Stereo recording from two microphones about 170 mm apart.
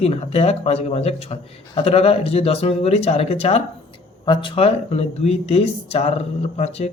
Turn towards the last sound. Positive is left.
turn(degrees=35)  # may be behind; listen again after turning